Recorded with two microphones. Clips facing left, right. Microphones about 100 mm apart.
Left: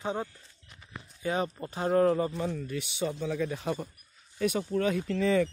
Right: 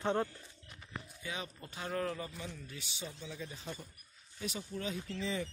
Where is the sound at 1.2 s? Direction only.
40° left (ahead or behind).